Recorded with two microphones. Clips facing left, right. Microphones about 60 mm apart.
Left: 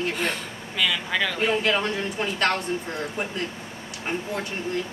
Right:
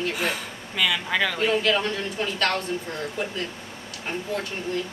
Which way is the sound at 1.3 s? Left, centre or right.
Centre.